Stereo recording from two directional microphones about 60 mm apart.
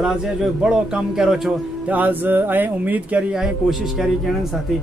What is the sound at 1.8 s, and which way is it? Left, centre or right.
Speech, right.